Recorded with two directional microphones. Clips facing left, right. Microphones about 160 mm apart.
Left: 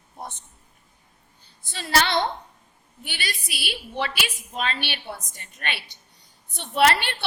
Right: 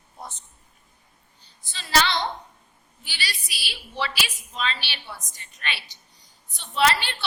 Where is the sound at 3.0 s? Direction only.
55° left (ahead or behind).